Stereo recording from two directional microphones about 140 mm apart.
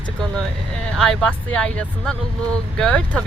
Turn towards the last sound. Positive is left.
turn(degrees=5)  # may be behind; listen again after turning